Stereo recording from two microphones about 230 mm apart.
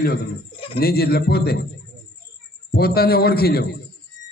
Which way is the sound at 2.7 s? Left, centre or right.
Left.